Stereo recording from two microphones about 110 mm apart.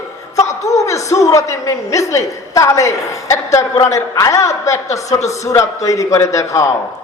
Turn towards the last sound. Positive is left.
turn(degrees=30)  # may be behind; listen again after turning